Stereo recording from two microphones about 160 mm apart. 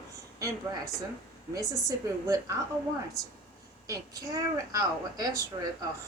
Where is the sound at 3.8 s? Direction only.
20° right (ahead or behind).